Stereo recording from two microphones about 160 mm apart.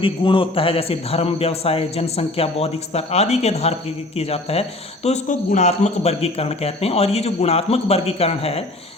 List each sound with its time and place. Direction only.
0.0 s a man's voice: 35° left (ahead or behind)